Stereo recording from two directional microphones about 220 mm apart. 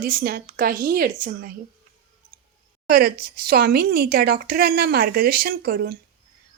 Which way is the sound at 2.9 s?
45° right (ahead or behind).